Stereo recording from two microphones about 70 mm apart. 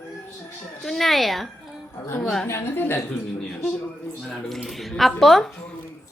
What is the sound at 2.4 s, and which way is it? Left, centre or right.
Speech, left.